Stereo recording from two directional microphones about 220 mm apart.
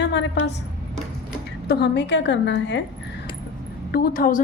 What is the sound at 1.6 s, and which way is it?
A woman's voice, 50° left (ahead or behind).